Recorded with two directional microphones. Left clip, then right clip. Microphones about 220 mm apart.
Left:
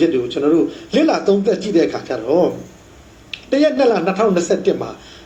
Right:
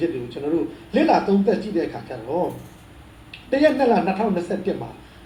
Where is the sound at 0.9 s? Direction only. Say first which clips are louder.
Left 1 dB; 40° left (ahead or behind).